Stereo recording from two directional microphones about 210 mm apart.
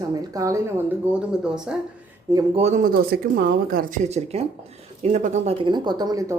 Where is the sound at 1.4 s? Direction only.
5° right (ahead or behind).